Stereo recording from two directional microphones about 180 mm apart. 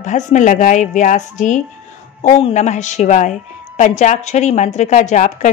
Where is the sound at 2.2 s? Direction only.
35° left (ahead or behind).